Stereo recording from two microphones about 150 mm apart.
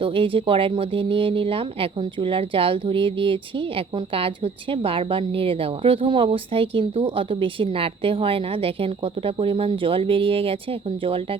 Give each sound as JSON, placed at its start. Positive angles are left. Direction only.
{"t": 0.0, "sound": "speech", "side_deg": -35}